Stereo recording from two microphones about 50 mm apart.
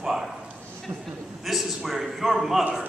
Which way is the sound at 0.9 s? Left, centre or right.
Right.